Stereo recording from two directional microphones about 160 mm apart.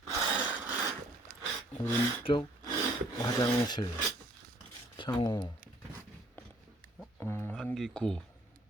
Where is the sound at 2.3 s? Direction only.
35° left (ahead or behind).